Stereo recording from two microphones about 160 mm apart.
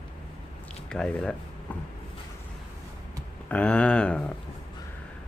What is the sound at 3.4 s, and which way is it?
Speech, 10° left (ahead or behind).